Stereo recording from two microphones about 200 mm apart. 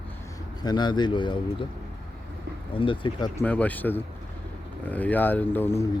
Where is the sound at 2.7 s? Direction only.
25° left (ahead or behind).